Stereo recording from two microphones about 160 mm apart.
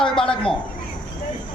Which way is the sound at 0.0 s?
5° left (ahead or behind).